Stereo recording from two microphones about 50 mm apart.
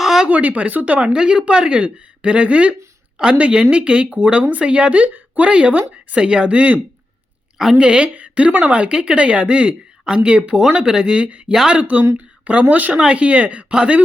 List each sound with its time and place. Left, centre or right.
0.0 s a sound: centre
0.3 s speech: right
0.9 s a woman's voice: centre
13.0 s a woman's voice: right